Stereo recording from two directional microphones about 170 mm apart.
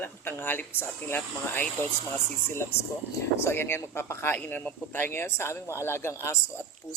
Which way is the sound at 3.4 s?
15° left (ahead or behind).